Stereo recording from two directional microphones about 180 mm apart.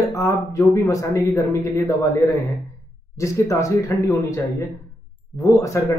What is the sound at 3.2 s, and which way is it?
Speech, 15° left (ahead or behind).